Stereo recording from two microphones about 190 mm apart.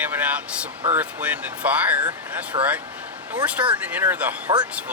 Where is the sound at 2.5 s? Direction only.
25° right (ahead or behind).